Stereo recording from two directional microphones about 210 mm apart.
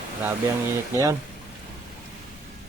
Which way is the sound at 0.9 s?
15° right (ahead or behind).